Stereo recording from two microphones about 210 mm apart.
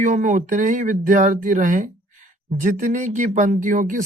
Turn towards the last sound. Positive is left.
turn(degrees=-40)  # may be behind; listen again after turning